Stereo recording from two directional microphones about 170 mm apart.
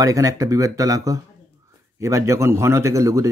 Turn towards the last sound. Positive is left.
turn(degrees=-20)  # may be behind; listen again after turning